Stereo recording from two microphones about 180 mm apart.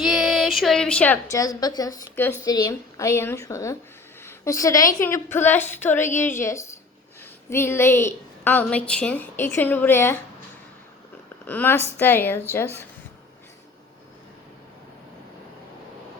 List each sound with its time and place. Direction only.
0.0 s a woman's voice: centre (ahead or behind)
11.4 s a woman's voice: 10° left (ahead or behind)